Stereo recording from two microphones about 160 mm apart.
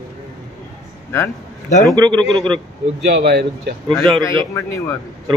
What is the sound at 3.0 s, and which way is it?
Speech, 75° right (ahead or behind).